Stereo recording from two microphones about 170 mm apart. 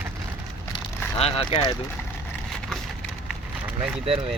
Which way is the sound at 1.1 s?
35° left (ahead or behind).